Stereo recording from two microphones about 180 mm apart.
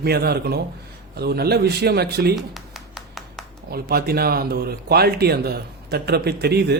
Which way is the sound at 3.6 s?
60° right (ahead or behind).